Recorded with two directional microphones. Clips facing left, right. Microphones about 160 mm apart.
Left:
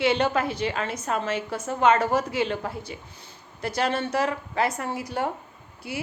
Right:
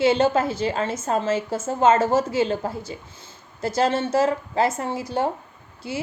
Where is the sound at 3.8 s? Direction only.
25° right (ahead or behind).